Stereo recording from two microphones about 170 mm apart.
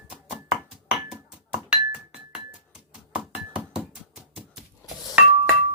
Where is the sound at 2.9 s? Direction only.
5° right (ahead or behind).